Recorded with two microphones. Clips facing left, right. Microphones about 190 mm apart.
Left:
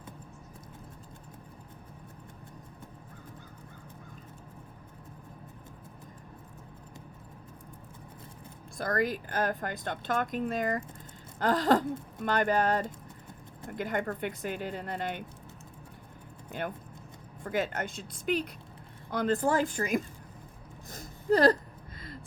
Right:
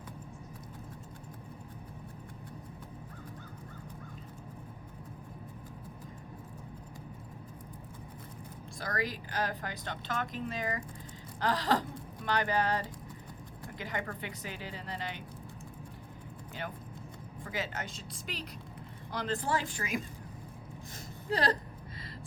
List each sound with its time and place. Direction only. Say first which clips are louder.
8.8 s speech: left 7 dB; 50° left (ahead or behind)
16.5 s speech: left 6 dB; 50° left (ahead or behind)
20.9 s a sound: left 8 dB; 45° left (ahead or behind)